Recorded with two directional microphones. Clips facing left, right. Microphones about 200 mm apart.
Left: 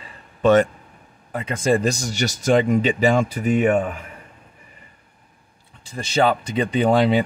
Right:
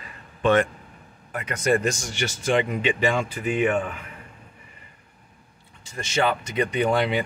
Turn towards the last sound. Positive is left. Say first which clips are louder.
# left 5 dB
turn(degrees=30)  # may be behind; listen again after turning